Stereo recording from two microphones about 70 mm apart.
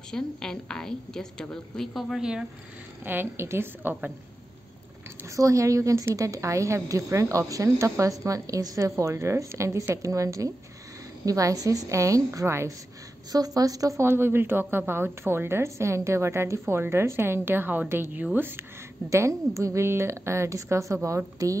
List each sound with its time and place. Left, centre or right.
0.1 s a woman's voice: centre
2.0 s speech: centre
3.1 s a woman's voice: right
5.3 s a woman's voice: right
13.3 s a woman's voice: right
14.0 s a woman's voice: right
19.0 s a woman's voice: right